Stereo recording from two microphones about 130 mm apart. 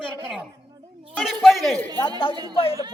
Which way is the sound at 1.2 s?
Centre (ahead or behind).